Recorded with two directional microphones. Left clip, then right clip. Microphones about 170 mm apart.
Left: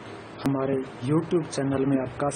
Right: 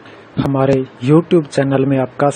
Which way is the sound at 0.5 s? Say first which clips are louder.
Right 14 dB; 40° right (ahead or behind).